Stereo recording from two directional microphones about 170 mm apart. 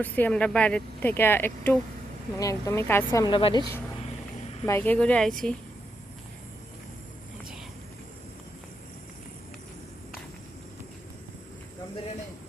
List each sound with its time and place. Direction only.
0.0 s speech: 10° left (ahead or behind)
3.2 s a woman's voice: 30° left (ahead or behind)
4.6 s speech: 15° left (ahead or behind)